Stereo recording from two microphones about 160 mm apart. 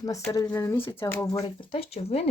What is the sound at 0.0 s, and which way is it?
Speech, 20° left (ahead or behind).